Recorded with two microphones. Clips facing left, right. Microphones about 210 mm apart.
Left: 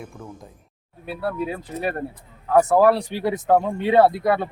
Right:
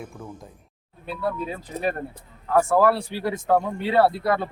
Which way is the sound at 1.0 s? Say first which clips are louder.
Left 2 dB; 10° left (ahead or behind).